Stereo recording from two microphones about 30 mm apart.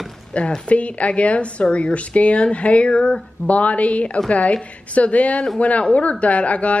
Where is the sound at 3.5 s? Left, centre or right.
Left.